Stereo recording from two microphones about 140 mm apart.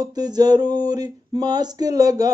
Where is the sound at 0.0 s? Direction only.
30° right (ahead or behind).